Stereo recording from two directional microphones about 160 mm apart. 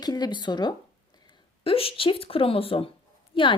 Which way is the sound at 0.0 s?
25° left (ahead or behind).